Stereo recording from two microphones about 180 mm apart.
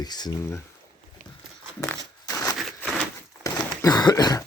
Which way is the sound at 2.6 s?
Centre (ahead or behind).